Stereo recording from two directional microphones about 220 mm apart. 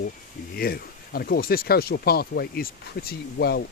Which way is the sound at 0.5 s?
45° left (ahead or behind).